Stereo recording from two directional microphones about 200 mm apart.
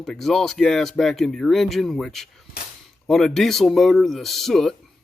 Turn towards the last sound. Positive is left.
turn(degrees=0)  # may be behind; listen again after turning